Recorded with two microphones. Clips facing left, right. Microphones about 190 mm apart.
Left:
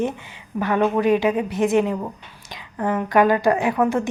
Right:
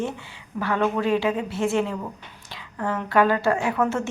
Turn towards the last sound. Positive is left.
turn(degrees=15)  # may be behind; listen again after turning